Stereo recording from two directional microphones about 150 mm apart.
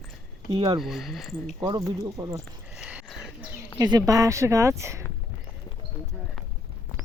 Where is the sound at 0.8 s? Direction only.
Centre (ahead or behind).